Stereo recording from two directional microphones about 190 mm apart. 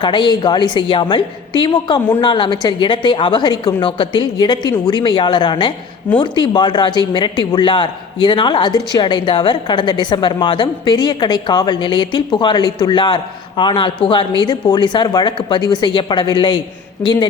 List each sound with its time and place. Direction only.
0.0 s a woman's voice: 25° left (ahead or behind)